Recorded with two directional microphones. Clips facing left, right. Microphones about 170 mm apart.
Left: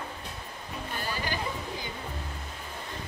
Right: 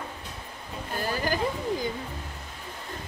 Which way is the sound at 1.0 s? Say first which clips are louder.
Right 7 dB; 45° right (ahead or behind).